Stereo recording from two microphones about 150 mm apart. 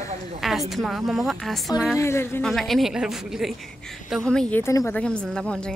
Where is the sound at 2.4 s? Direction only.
Centre (ahead or behind).